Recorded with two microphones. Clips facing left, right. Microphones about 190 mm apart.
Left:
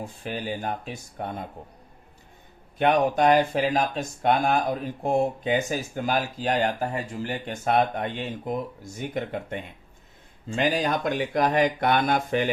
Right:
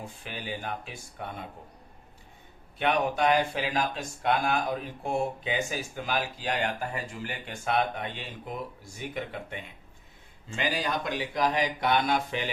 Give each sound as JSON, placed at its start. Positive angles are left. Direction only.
{"t": 0.3, "sound": "speech", "side_deg": 40}
{"t": 2.7, "sound": "speech", "side_deg": 45}